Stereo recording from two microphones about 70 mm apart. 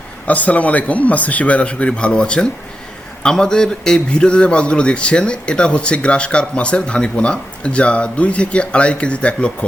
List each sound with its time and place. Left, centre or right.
0.3 s a man's voice: left